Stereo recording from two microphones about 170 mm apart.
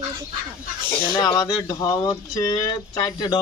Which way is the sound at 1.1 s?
25° left (ahead or behind).